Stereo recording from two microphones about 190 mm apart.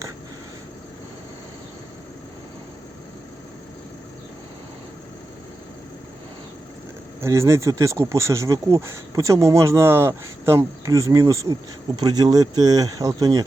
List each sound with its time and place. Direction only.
7.2 s speech: 15° right (ahead or behind)